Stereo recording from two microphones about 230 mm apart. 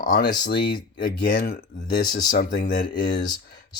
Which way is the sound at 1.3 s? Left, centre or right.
Left.